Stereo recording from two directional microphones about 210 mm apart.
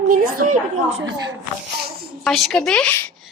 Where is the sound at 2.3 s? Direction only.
Centre (ahead or behind).